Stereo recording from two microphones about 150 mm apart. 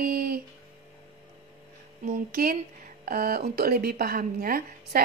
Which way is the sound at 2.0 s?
70° right (ahead or behind).